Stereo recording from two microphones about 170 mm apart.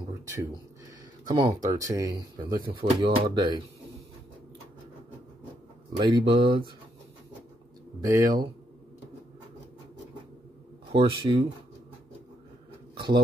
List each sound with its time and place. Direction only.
1.3 s speech: 25° right (ahead or behind)
5.9 s speech: 25° right (ahead or behind)
8.1 s speech: 25° right (ahead or behind)
10.9 s speech: 30° right (ahead or behind)
12.9 s a sound: 25° right (ahead or behind)